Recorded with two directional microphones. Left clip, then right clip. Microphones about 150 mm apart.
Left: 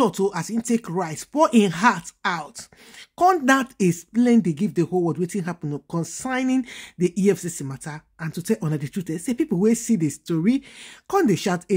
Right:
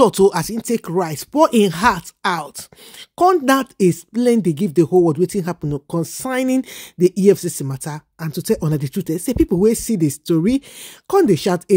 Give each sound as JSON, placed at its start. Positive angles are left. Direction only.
{"t": 0.0, "sound": "speech", "side_deg": -60}
{"t": 0.6, "sound": "speech", "side_deg": -45}
{"t": 3.4, "sound": "speech", "side_deg": -35}